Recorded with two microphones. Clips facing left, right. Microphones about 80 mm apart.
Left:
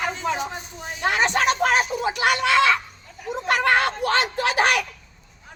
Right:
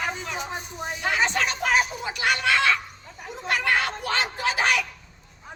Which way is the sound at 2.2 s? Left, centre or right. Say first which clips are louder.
Left 3 dB; left.